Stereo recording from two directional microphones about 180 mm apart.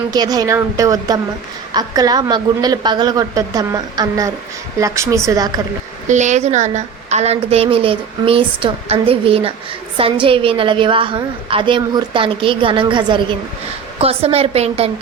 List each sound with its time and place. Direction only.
0.1 s a woman's voice: 20° right (ahead or behind)
6.1 s a woman's voice: 40° right (ahead or behind)